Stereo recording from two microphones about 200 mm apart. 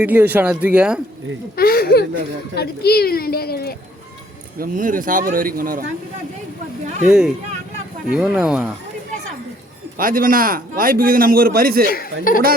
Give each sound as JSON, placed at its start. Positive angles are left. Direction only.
{"t": 0.0, "sound": "speech", "side_deg": -10}
{"t": 1.5, "sound": "a child's voice", "side_deg": 50}
{"t": 4.6, "sound": "a man's voice", "side_deg": -40}
{"t": 6.8, "sound": "speech", "side_deg": -35}
{"t": 7.1, "sound": "speech", "side_deg": -5}
{"t": 10.0, "sound": "a man's voice", "side_deg": -45}
{"t": 12.3, "sound": "a child's voice", "side_deg": 45}